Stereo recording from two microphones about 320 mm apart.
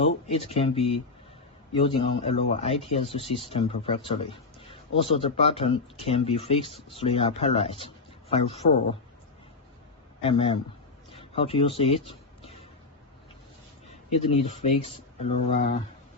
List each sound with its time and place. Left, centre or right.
0.0 s speech: centre
10.2 s speech: centre
11.1 s a sound: centre
14.1 s speech: centre